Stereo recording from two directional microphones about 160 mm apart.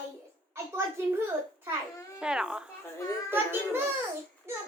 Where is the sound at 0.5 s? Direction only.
15° right (ahead or behind).